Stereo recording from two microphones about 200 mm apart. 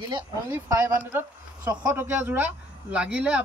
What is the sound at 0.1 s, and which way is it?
Speech, 15° right (ahead or behind).